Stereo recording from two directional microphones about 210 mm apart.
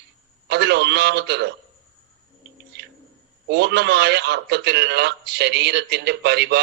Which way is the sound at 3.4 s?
55° right (ahead or behind).